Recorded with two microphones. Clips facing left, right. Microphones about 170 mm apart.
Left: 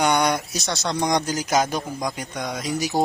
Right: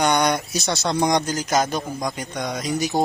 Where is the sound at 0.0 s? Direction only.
5° left (ahead or behind).